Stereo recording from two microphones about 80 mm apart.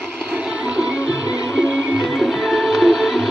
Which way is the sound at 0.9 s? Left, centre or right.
Left.